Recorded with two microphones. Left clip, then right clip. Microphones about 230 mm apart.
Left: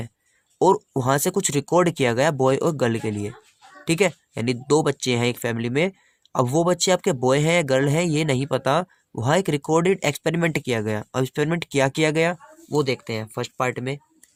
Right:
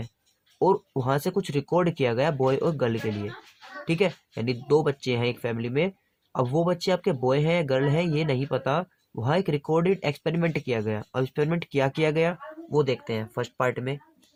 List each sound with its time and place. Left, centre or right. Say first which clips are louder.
0.6 s speech: left 5 dB; left